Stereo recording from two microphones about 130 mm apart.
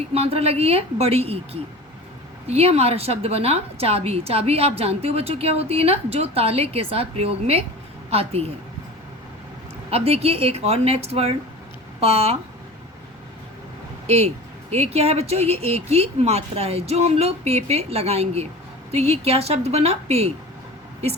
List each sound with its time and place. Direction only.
0.1 s a woman's voice: 50° right (ahead or behind)
2.5 s a woman's voice: 50° right (ahead or behind)
9.9 s a woman's voice: 50° right (ahead or behind)
14.1 s a woman's voice: 55° right (ahead or behind)